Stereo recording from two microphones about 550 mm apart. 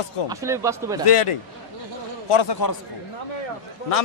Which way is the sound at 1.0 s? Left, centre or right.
Left.